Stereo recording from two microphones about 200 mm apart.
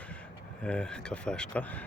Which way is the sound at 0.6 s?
5° left (ahead or behind).